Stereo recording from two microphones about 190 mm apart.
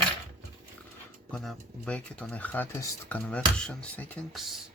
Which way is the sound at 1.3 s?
Centre (ahead or behind).